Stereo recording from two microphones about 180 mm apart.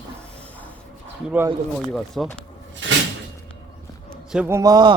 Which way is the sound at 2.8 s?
90° right.